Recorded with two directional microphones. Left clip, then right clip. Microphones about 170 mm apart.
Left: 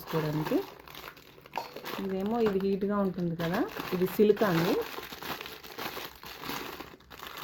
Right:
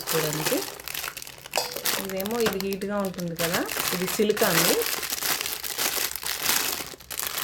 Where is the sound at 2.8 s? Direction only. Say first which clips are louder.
Right 2 dB; 50° left (ahead or behind).